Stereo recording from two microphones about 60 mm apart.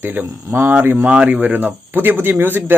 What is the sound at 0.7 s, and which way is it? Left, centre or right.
Speech, right.